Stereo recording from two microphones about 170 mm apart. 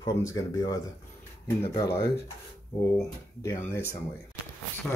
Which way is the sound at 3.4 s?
15° left (ahead or behind).